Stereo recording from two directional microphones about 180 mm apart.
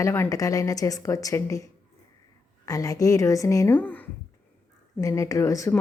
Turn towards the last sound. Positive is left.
turn(degrees=15)  # may be behind; listen again after turning